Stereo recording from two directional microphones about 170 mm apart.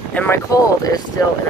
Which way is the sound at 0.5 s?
20° left (ahead or behind).